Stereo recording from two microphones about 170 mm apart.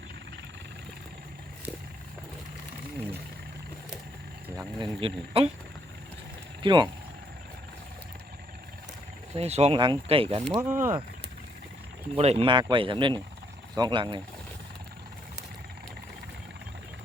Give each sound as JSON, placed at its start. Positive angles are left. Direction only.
{"t": 4.8, "sound": "speech", "side_deg": -30}
{"t": 6.6, "sound": "speech", "side_deg": -25}
{"t": 9.3, "sound": "speech", "side_deg": -35}
{"t": 10.5, "sound": "speech", "side_deg": -15}
{"t": 12.1, "sound": "speech", "side_deg": -35}